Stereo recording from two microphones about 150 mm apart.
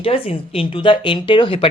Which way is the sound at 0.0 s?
40° left (ahead or behind).